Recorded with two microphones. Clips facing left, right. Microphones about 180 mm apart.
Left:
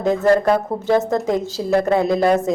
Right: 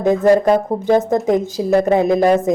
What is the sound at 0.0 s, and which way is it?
A woman's voice, 15° right (ahead or behind).